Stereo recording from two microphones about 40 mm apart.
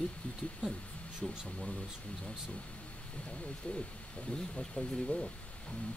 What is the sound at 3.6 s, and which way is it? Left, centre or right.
Speech, left.